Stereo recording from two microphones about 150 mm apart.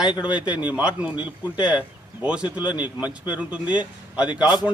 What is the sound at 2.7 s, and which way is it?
Speech, 30° left (ahead or behind).